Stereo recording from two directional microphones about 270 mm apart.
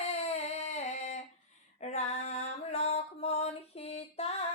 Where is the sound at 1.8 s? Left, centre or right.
Left.